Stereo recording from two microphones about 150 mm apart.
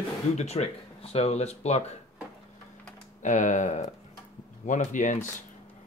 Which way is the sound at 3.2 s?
55° left (ahead or behind).